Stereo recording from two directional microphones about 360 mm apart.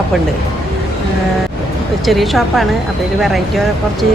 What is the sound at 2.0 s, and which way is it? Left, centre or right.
Speech, centre.